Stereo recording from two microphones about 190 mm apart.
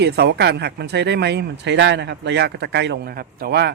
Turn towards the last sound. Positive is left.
turn(degrees=-60)  # may be behind; listen again after turning